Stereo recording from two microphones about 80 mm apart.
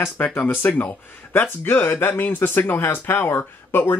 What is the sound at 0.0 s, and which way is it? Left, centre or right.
Speech, left.